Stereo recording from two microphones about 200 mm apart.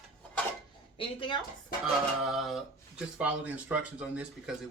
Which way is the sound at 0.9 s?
25° left (ahead or behind).